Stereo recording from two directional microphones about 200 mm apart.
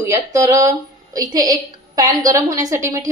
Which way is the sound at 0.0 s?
15° right (ahead or behind).